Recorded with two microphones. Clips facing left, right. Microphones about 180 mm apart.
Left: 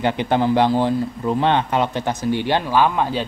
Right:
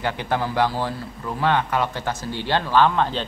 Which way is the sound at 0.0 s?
20° left (ahead or behind).